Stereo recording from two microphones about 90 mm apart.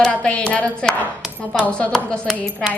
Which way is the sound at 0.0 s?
10° left (ahead or behind).